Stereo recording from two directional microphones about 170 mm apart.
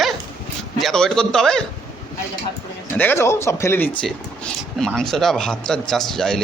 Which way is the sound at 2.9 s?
10° left (ahead or behind).